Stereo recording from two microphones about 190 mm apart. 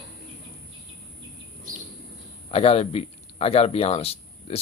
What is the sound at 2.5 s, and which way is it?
A man's voice, 30° left (ahead or behind).